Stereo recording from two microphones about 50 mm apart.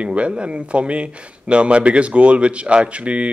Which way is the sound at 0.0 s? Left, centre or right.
Right.